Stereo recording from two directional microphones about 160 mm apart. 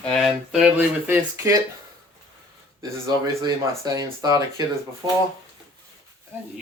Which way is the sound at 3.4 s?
25° right (ahead or behind).